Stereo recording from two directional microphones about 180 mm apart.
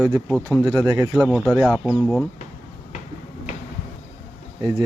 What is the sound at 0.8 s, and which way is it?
Speech, 20° right (ahead or behind).